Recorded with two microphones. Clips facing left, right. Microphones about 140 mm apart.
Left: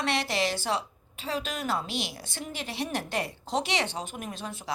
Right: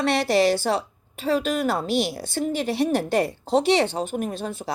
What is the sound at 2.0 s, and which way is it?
Speech, 35° right (ahead or behind).